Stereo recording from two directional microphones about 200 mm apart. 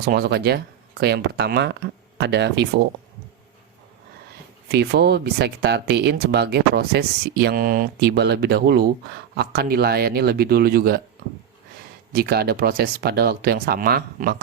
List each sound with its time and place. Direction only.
0.0 s speech: 55° right (ahead or behind)
4.7 s speech: 55° right (ahead or behind)
12.1 s speech: 50° right (ahead or behind)